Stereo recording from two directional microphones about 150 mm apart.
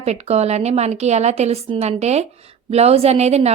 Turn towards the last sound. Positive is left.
turn(degrees=-45)  # may be behind; listen again after turning